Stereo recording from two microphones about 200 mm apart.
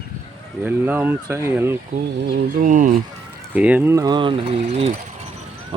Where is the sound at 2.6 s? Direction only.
40° right (ahead or behind).